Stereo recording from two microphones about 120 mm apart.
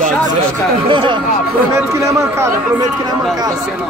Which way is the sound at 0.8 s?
40° right (ahead or behind).